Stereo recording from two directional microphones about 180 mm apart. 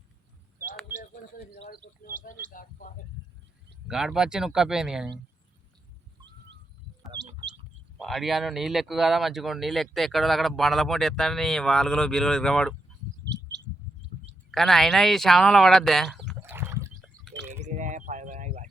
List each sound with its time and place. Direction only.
1.8 s speech: 45° left (ahead or behind)
3.8 s speech: 5° right (ahead or behind)
7.9 s speech: centre (ahead or behind)
14.5 s speech: centre (ahead or behind)
16.4 s a sound: 15° right (ahead or behind)
17.6 s a sound: 45° right (ahead or behind)